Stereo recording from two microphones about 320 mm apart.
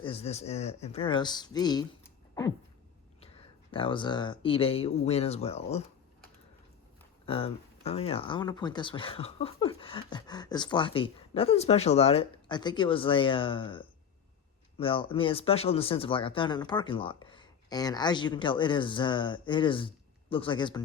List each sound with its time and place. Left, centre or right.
0.0 s speech: centre
3.7 s speech: centre
7.3 s speech: centre